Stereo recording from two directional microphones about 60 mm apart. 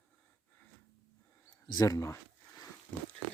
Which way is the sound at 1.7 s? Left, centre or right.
Left.